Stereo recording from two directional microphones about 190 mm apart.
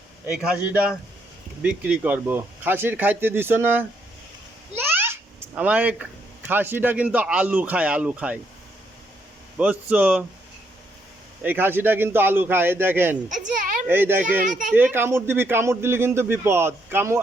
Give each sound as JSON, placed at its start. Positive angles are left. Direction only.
{"t": 0.3, "sound": "a man's voice", "side_deg": -5}
{"t": 4.8, "sound": "babbling", "side_deg": -10}
{"t": 6.5, "sound": "a man's voice", "side_deg": -10}
{"t": 9.6, "sound": "a man's voice", "side_deg": -5}
{"t": 11.4, "sound": "a man's voice", "side_deg": -10}
{"t": 13.2, "sound": "a child's voice", "side_deg": -40}
{"t": 13.8, "sound": "a man's voice", "side_deg": -10}